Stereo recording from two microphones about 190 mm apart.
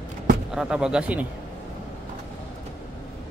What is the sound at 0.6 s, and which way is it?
Speech, 5° right (ahead or behind).